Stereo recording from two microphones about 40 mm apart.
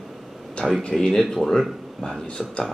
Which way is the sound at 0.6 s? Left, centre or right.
Centre.